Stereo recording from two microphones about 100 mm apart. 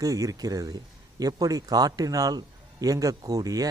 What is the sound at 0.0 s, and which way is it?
Speech, 35° right (ahead or behind).